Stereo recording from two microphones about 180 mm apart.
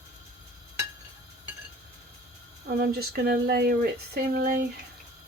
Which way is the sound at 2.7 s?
60° right (ahead or behind).